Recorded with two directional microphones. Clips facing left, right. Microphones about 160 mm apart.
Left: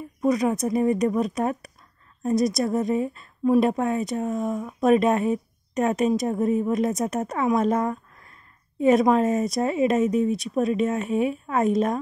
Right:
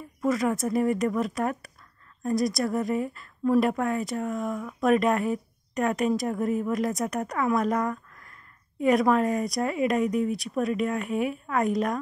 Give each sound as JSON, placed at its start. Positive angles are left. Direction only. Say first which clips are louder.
{"t": 0.2, "sound": "a woman's voice", "louder": "left 3 dB", "side_deg": 20}